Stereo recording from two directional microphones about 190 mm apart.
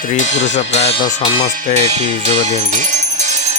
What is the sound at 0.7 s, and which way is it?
Speech, 30° left (ahead or behind).